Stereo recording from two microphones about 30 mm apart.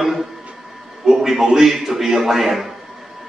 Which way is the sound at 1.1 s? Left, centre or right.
Centre.